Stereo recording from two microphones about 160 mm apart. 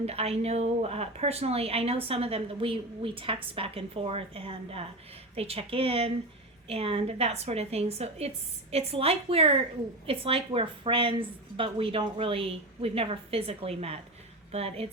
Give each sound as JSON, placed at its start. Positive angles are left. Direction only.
{"t": 0.0, "sound": "a woman's voice", "side_deg": -40}